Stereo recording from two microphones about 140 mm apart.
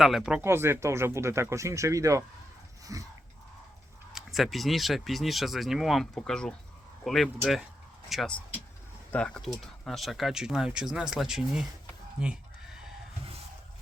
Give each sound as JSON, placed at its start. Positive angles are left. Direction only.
{"t": 0.0, "sound": "speech", "side_deg": -5}
{"t": 0.4, "sound": "speech", "side_deg": -15}
{"t": 4.1, "sound": "speech", "side_deg": 0}
{"t": 12.2, "sound": "chicken", "side_deg": -5}